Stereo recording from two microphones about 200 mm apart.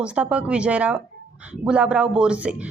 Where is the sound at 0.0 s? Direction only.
5° right (ahead or behind).